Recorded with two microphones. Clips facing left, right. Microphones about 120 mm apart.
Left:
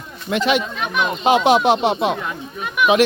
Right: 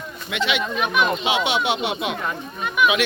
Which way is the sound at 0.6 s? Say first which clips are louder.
Right 1 dB; 5° right (ahead or behind).